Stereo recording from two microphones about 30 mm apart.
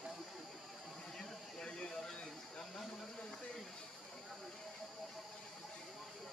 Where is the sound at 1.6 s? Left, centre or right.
Left.